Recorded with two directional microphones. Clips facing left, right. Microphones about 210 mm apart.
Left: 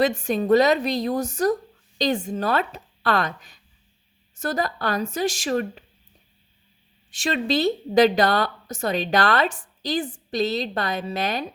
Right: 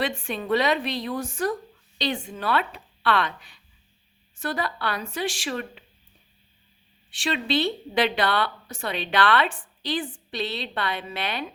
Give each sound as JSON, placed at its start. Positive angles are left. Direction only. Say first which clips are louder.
{"t": 0.0, "sound": "a woman's voice", "louder": "left 7 dB", "side_deg": 40}
{"t": 7.1, "sound": "a woman's voice", "louder": "left 2 dB", "side_deg": 45}